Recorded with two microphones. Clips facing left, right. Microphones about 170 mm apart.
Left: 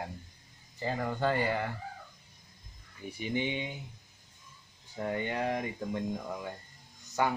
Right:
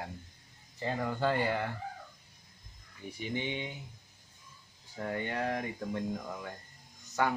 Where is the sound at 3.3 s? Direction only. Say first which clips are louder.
Left 3 dB; 15° left (ahead or behind).